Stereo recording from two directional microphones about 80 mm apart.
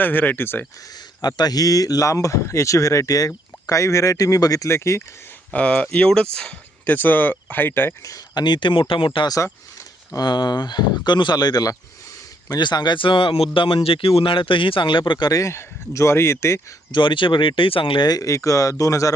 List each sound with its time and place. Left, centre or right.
0.0 s speech: left
1.2 s speech: left
5.5 s speech: centre
8.0 s speech: left
10.1 s speech: left
15.3 s speech: left
16.9 s speech: left
18.1 s speech: left